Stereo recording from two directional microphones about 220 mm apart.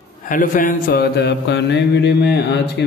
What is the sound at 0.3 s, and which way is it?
A man's voice, 40° left (ahead or behind).